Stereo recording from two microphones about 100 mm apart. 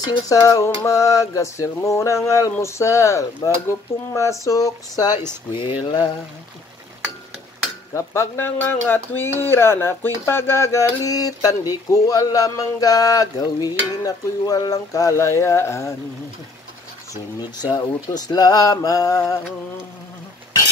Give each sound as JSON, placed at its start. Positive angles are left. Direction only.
{"t": 0.3, "sound": "speech", "side_deg": 35}
{"t": 7.9, "sound": "speech", "side_deg": 25}
{"t": 17.1, "sound": "speech", "side_deg": 45}